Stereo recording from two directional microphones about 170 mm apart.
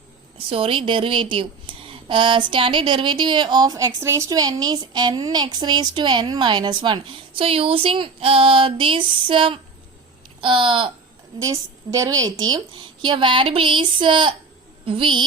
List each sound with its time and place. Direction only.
0.5 s a woman's voice: 30° right (ahead or behind)